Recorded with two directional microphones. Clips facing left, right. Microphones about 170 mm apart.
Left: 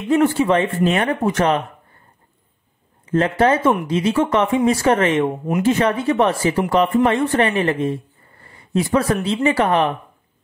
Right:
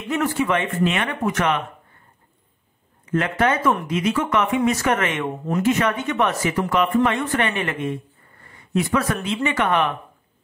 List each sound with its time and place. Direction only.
0.1 s speech: 30° left (ahead or behind)
3.1 s speech: 30° left (ahead or behind)